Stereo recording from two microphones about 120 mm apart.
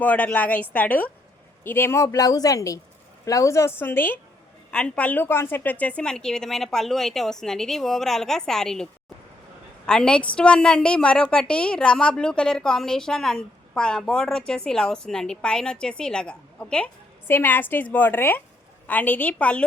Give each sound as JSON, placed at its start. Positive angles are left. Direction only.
{"t": 0.0, "sound": "a woman's voice", "side_deg": 10}